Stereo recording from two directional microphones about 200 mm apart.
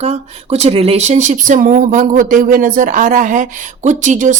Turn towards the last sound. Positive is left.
turn(degrees=-35)  # may be behind; listen again after turning